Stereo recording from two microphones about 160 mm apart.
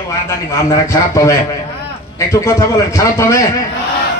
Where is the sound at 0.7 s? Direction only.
20° left (ahead or behind).